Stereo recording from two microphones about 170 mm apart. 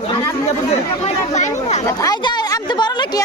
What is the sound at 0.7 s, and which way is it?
Speech, 40° left (ahead or behind).